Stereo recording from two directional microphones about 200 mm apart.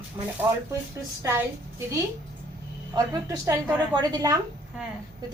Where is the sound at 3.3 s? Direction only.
15° right (ahead or behind).